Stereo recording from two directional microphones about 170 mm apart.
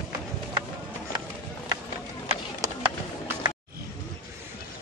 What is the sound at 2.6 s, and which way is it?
Music, 20° right (ahead or behind).